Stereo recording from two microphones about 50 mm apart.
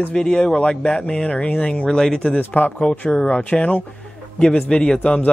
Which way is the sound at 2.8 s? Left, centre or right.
Centre.